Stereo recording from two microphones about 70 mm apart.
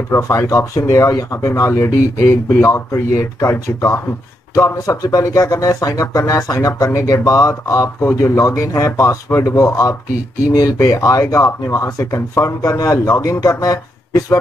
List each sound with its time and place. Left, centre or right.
0.1 s speech: left